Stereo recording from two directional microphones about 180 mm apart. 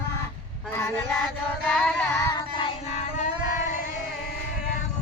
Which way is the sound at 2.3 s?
30° left (ahead or behind).